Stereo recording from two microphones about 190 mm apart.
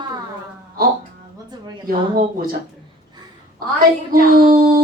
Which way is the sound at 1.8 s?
50° right (ahead or behind).